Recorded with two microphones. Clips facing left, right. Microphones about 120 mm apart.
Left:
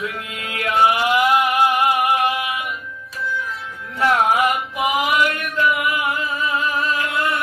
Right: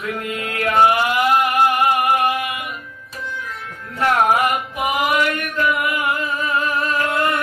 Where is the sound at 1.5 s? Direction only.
45° right (ahead or behind).